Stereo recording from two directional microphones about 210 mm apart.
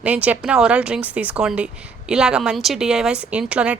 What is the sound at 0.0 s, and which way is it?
A woman's voice, 5° right (ahead or behind).